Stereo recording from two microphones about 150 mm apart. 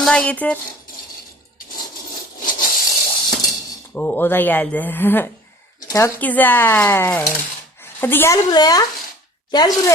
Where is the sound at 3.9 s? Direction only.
10° left (ahead or behind).